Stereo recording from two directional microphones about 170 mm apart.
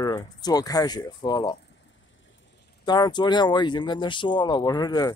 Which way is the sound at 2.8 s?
25° left (ahead or behind).